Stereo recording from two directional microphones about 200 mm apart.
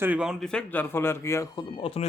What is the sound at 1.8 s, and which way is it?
Speech, 30° left (ahead or behind).